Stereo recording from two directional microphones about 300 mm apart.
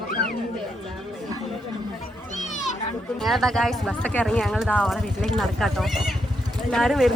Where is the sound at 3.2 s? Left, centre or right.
Centre.